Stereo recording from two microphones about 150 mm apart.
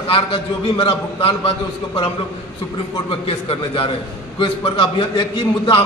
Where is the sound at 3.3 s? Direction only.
40° left (ahead or behind).